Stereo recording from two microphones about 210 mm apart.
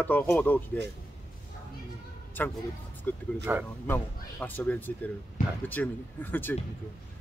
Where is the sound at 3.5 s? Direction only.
10° right (ahead or behind).